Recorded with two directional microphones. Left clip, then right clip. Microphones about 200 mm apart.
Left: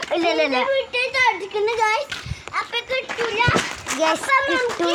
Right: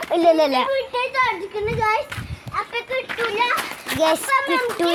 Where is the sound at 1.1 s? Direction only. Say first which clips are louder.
Left 3 dB; 25° left (ahead or behind).